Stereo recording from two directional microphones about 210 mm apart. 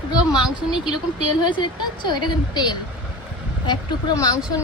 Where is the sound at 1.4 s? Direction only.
20° left (ahead or behind).